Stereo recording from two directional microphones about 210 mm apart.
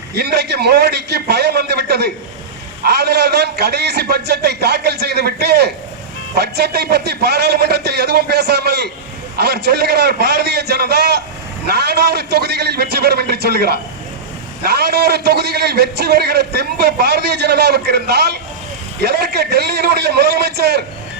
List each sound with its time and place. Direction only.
0.2 s a man's voice: 50° right (ahead or behind)